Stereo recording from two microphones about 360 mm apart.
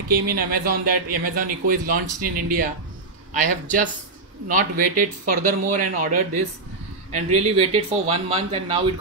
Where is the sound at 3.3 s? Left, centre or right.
Right.